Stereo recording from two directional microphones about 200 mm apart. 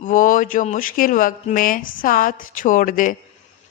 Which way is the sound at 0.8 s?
45° left (ahead or behind).